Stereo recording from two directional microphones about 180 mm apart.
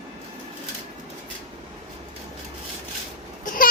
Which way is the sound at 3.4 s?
50° left (ahead or behind).